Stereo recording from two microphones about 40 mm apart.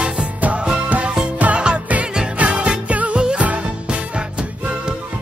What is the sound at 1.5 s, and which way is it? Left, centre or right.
Music, right.